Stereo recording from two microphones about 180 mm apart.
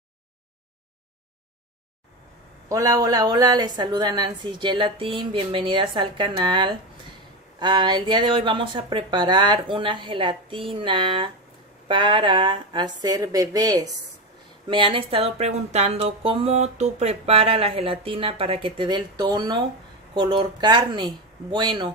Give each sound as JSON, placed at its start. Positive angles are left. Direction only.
{"t": 2.7, "sound": "a woman's voice", "side_deg": -20}